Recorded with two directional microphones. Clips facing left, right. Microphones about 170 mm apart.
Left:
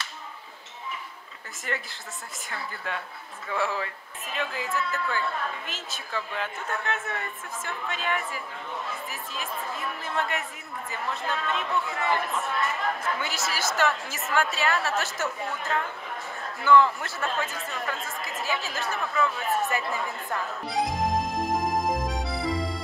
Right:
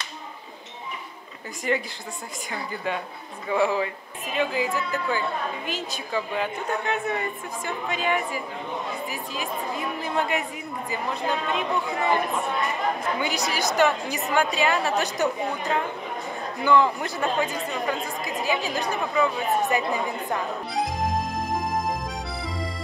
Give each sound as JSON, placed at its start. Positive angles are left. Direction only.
{"t": 1.7, "sound": "speech", "side_deg": -5}
{"t": 3.4, "sound": "speech", "side_deg": -15}
{"t": 4.3, "sound": "speech", "side_deg": 0}
{"t": 4.9, "sound": "speech", "side_deg": -15}
{"t": 9.1, "sound": "speech", "side_deg": 0}
{"t": 9.7, "sound": "speech", "side_deg": -15}
{"t": 10.0, "sound": "speech", "side_deg": 0}
{"t": 11.1, "sound": "speech", "side_deg": -15}
{"t": 20.7, "sound": "music", "side_deg": 0}